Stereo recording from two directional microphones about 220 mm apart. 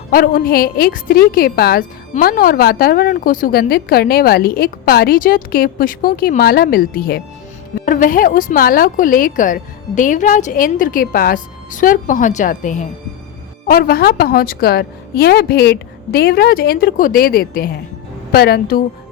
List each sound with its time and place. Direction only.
0.1 s a woman's voice: 40° left (ahead or behind)